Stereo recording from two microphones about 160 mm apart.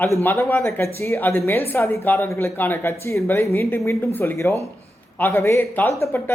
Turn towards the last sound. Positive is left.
turn(degrees=15)  # may be behind; listen again after turning